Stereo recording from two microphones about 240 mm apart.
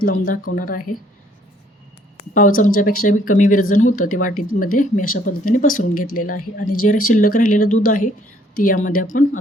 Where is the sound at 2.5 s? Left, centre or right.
Left.